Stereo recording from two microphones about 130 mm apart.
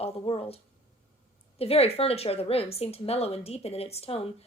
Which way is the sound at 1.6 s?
50° left (ahead or behind).